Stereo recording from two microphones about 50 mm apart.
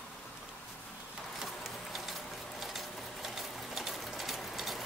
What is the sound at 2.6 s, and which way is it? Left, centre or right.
Sewing machine, centre.